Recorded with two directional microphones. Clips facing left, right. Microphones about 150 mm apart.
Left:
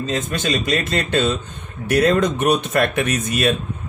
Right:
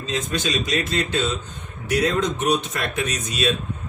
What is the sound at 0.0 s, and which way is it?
Speech, 50° left (ahead or behind).